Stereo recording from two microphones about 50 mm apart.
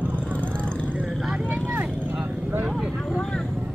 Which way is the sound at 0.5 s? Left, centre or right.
Left.